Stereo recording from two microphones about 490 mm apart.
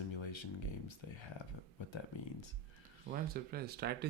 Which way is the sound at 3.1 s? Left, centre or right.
Centre.